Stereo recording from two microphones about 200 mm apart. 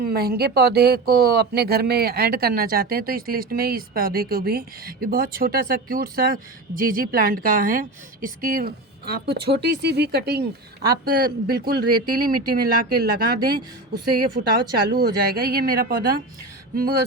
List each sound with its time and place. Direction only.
0.0 s speech: 50° right (ahead or behind)